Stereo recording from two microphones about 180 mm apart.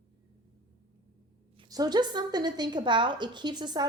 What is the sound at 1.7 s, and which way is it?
A woman's voice, 20° right (ahead or behind).